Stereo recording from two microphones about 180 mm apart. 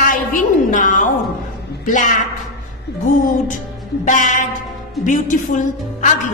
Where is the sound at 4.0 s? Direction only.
45° left (ahead or behind).